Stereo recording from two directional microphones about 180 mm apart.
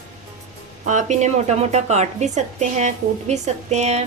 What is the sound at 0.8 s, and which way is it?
A woman's voice, 40° right (ahead or behind).